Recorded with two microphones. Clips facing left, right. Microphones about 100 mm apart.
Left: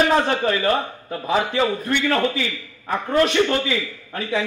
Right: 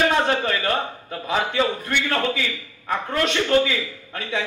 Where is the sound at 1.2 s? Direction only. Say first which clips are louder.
Left 3 dB; 30° left (ahead or behind).